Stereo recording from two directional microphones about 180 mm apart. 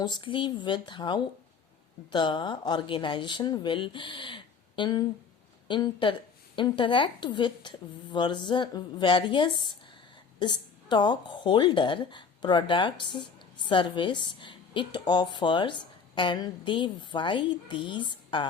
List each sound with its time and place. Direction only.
0.0 s a woman's voice: 25° left (ahead or behind)